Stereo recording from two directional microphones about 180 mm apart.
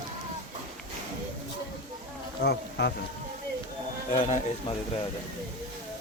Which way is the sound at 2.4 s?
65° left (ahead or behind).